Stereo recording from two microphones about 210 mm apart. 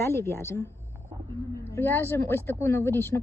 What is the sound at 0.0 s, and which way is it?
Speech, 10° left (ahead or behind).